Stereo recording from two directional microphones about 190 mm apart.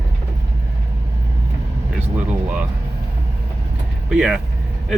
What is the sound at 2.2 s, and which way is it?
Speech, 10° right (ahead or behind).